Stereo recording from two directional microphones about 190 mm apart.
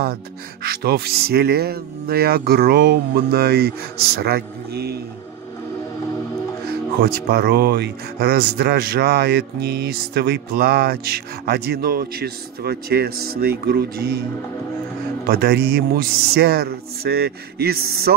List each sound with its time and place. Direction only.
0.7 s speech: 55° right (ahead or behind)
7.0 s speech: 55° right (ahead or behind)
15.2 s speech: 55° right (ahead or behind)